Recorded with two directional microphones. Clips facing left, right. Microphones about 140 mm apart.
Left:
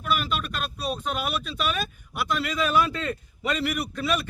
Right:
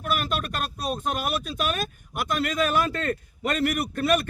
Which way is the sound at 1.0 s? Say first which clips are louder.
Right 2 dB; 45° right (ahead or behind).